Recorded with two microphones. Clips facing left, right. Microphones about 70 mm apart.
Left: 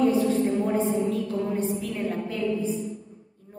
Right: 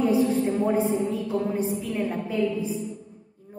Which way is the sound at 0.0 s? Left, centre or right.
Centre.